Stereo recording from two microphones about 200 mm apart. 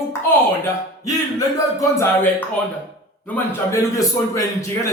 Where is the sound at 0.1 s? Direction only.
15° left (ahead or behind).